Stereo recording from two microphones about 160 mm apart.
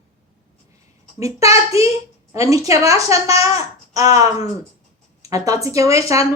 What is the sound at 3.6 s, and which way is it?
Babbling, 20° right (ahead or behind).